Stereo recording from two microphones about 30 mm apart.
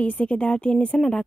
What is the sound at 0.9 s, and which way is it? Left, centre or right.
Speech, left.